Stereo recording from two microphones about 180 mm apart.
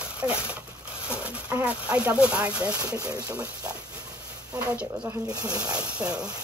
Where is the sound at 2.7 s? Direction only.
20° right (ahead or behind).